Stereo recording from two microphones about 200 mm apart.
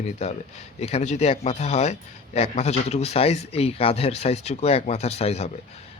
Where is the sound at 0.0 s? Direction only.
35° left (ahead or behind).